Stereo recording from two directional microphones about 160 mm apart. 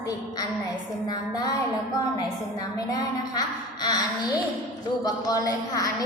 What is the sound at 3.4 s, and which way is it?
A woman's voice, 25° left (ahead or behind).